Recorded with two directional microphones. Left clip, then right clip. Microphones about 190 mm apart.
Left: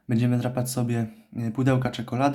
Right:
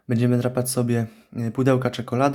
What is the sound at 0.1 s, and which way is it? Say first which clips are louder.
Speech: right 4 dB; 25° right (ahead or behind).